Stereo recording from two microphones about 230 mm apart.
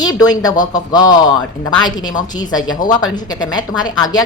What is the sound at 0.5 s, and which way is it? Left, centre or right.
Speech, left.